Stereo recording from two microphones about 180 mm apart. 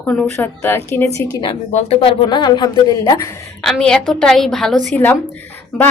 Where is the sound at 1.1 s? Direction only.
25° left (ahead or behind).